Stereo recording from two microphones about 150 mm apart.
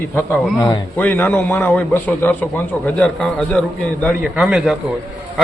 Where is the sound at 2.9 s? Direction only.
5° left (ahead or behind).